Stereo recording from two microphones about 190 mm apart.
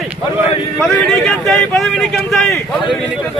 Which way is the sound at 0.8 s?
Centre (ahead or behind).